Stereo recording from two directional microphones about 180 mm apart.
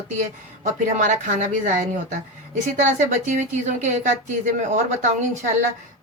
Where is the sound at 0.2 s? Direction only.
45° right (ahead or behind).